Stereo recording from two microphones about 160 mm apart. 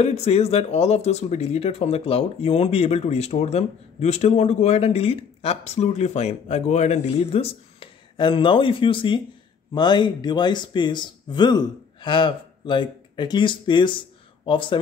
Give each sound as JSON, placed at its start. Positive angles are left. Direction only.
{"t": 0.0, "sound": "speech", "side_deg": 40}